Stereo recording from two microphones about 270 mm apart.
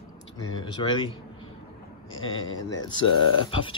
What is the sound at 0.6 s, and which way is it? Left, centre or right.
Speech, centre.